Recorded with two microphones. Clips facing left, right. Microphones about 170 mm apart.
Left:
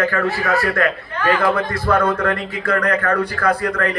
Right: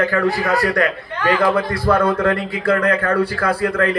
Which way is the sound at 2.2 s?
30° right (ahead or behind).